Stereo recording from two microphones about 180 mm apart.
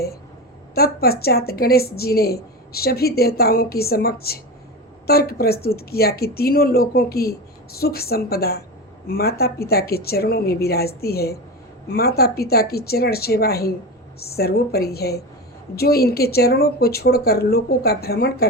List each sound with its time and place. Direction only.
0.7 s a woman's voice: 60° left (ahead or behind)